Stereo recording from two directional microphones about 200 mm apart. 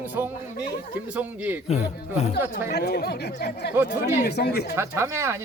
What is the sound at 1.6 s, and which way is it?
Speech, 35° left (ahead or behind).